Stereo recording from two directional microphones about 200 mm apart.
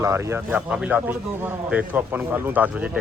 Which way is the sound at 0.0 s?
15° right (ahead or behind).